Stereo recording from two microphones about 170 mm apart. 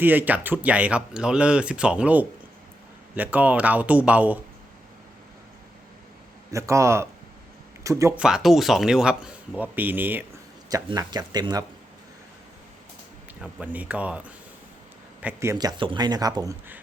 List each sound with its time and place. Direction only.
0.0 s speech: 10° right (ahead or behind)
6.5 s speech: 15° right (ahead or behind)
8.2 s speech: 5° right (ahead or behind)
10.7 s speech: 20° right (ahead or behind)
13.4 s speech: 10° right (ahead or behind)